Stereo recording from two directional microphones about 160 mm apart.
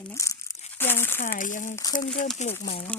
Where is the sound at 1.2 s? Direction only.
55° left (ahead or behind).